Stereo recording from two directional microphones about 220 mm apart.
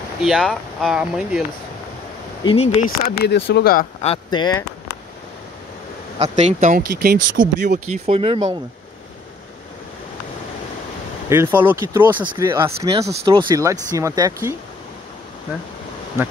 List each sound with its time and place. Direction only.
0.2 s speech: centre (ahead or behind)
2.4 s speech: 30° left (ahead or behind); by 3.8 s 45° left (ahead or behind)
4.0 s speech: 25° left (ahead or behind)
6.1 s speech: 30° right (ahead or behind)
7.4 s speech: 60° right (ahead or behind)
8.1 s speech: 25° right (ahead or behind)
11.2 s speech: 10° right (ahead or behind)